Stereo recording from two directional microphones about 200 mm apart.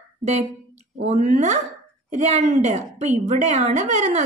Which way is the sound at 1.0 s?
35° right (ahead or behind).